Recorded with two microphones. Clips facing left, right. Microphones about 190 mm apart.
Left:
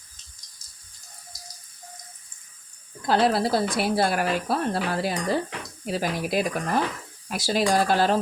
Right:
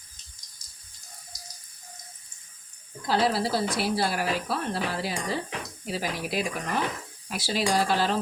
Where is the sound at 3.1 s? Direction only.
55° left (ahead or behind).